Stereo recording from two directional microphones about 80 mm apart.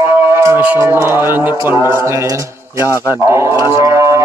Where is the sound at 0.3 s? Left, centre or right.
Right.